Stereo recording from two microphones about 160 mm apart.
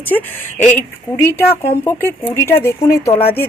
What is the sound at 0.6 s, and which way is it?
Speech, 15° left (ahead or behind).